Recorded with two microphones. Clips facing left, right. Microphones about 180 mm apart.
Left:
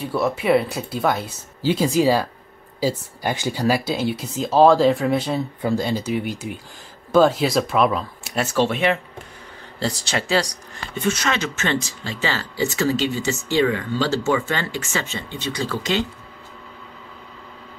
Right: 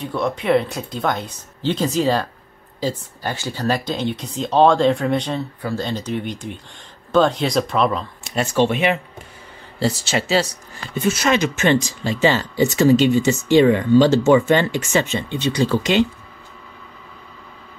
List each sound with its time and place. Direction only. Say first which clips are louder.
0.0 s speech: left 1 dB; 5° left (ahead or behind); by 16.1 s 20° right (ahead or behind)